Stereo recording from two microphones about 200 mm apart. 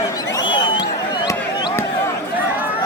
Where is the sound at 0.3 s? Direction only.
25° left (ahead or behind).